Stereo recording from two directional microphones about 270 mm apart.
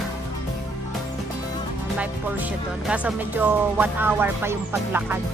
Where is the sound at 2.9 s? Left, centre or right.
Centre.